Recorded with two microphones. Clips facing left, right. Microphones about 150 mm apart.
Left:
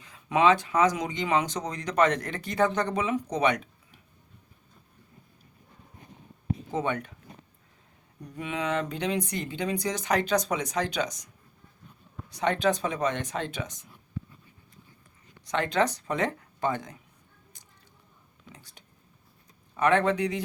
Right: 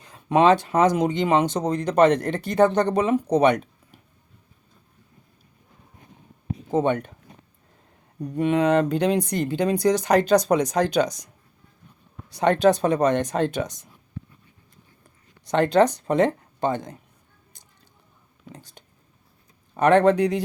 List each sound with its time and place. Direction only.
0.0 s a sound: 40° right (ahead or behind)
1.0 s speech: 25° right (ahead or behind)
1.6 s speech: 55° right (ahead or behind)
2.2 s speech: 35° right (ahead or behind)
6.7 s speech: 35° right (ahead or behind)
8.2 s speech: 60° right (ahead or behind)
9.0 s speech: 35° right (ahead or behind)
9.2 s speech: 65° right (ahead or behind)
9.7 s speech: 35° right (ahead or behind)
12.5 s speech: 45° right (ahead or behind)
15.4 s speech: 35° right (ahead or behind)
18.5 s speech: 35° right (ahead or behind)